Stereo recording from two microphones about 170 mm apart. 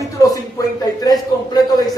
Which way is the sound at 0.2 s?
20° left (ahead or behind).